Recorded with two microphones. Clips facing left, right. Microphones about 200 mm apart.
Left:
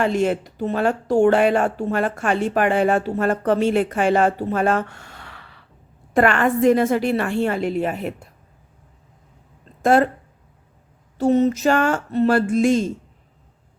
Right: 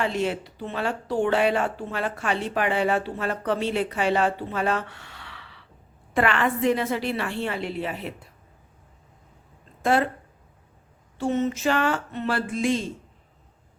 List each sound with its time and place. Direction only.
0.0 s speech: 45° left (ahead or behind)
9.8 s speech: 45° left (ahead or behind)
11.2 s speech: 40° left (ahead or behind)